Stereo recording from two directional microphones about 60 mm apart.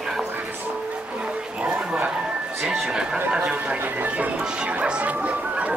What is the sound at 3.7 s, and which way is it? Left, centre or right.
Horse, right.